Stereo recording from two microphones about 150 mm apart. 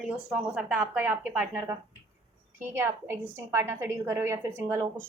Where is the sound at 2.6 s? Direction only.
15° right (ahead or behind).